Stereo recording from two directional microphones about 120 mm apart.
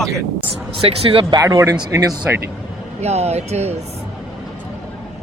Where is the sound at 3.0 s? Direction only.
65° right (ahead or behind).